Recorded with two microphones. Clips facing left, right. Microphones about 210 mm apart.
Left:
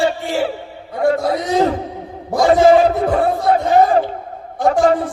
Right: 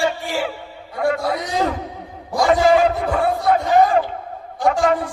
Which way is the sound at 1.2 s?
20° left (ahead or behind).